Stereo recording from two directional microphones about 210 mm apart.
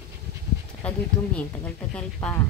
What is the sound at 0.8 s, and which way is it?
Speech, 5° left (ahead or behind).